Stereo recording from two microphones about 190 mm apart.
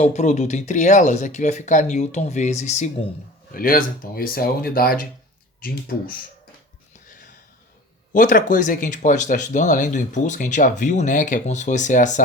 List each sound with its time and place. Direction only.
0.0 s speech: 35° left (ahead or behind)
8.1 s speech: 45° left (ahead or behind)